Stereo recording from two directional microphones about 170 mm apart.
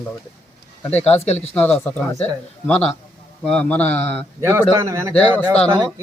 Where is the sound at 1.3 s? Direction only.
40° left (ahead or behind).